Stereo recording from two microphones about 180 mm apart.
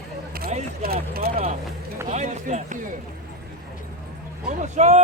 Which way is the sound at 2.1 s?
40° right (ahead or behind).